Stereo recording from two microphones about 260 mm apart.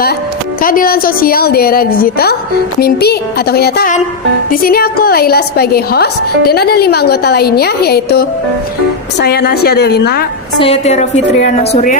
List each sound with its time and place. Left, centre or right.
0.6 s a woman's voice: left
10.6 s a woman's voice: left